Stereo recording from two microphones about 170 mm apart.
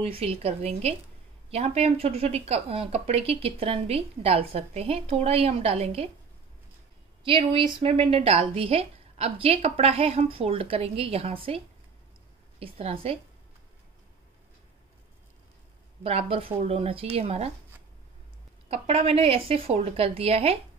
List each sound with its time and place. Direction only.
0.0 s speech: 35° right (ahead or behind)
7.2 s speech: 30° right (ahead or behind)
16.0 s speech: 35° right (ahead or behind)
18.7 s speech: 35° right (ahead or behind)